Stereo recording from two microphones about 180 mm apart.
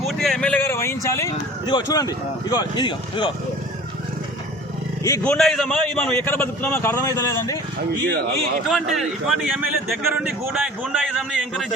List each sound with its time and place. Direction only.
0.0 s a sound: centre (ahead or behind)
1.6 s speech: 20° left (ahead or behind)
5.2 s a man's voice: 5° left (ahead or behind)
8.6 s a man's voice: centre (ahead or behind)
10.0 s a man's voice: 10° right (ahead or behind)